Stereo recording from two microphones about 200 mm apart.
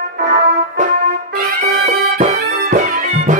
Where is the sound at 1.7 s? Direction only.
40° right (ahead or behind).